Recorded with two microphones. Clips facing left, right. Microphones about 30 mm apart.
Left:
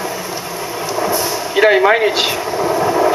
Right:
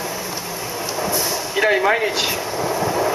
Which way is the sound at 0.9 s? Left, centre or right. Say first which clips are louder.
Left 5 dB; centre.